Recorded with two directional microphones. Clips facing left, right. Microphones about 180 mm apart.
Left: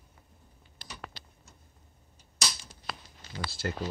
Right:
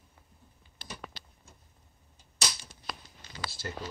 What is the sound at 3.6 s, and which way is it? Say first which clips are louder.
Speech: left 6 dB; 60° left (ahead or behind).